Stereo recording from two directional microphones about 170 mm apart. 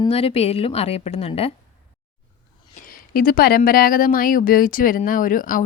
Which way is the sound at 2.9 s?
55° left (ahead or behind).